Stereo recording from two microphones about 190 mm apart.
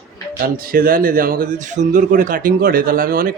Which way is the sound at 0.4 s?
50° right (ahead or behind).